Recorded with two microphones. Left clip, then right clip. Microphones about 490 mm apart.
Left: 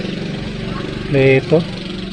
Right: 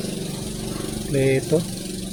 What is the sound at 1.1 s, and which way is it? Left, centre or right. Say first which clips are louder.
Speech: left 8 dB; right.